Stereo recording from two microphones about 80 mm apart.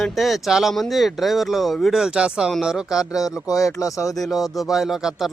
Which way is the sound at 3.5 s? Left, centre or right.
Left.